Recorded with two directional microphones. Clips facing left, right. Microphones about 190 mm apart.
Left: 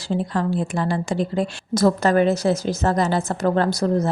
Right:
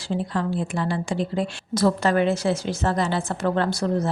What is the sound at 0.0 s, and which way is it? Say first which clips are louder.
A woman's voice: left 3 dB; 40° left (ahead or behind).